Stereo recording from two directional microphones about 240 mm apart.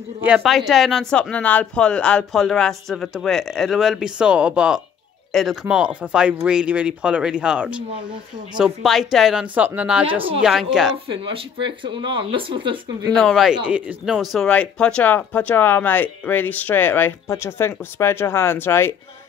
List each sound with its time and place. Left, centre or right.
0.2 s speech: centre
11.1 s speech: right
13.1 s speech: centre